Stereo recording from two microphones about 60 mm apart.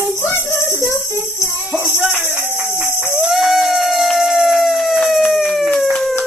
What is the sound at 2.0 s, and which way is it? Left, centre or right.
Music, right.